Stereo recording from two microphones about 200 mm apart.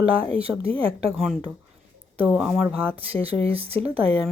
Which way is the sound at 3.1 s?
30° right (ahead or behind).